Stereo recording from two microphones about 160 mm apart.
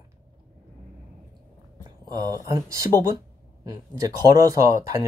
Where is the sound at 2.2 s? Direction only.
20° right (ahead or behind).